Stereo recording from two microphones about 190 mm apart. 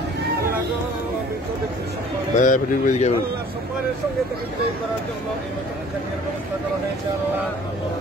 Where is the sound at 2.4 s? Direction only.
40° left (ahead or behind).